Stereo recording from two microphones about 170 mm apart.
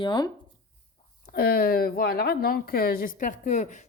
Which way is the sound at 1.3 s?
60° left (ahead or behind).